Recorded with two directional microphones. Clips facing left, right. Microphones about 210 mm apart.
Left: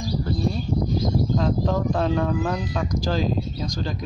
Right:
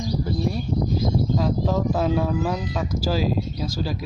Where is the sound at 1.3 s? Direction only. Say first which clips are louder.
Even; 5° right (ahead or behind).